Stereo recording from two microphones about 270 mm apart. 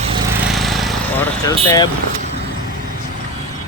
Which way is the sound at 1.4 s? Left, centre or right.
Centre.